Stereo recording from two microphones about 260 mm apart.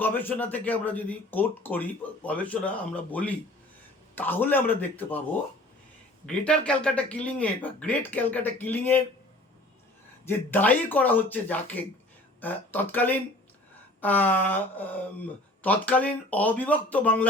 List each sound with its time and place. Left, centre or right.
0.0 s speech: centre
6.2 s speech: centre
10.2 s speech: centre